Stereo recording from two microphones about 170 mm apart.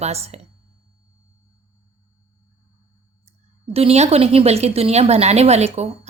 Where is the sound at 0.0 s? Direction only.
40° right (ahead or behind).